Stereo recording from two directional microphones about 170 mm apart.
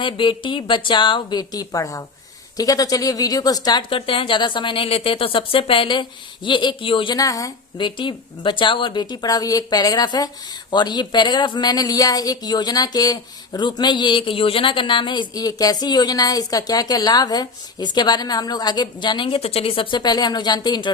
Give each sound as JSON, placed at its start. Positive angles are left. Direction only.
{"t": 0.0, "sound": "speech", "side_deg": 30}